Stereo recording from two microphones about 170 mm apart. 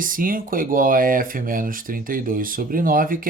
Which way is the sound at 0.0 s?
55° right (ahead or behind).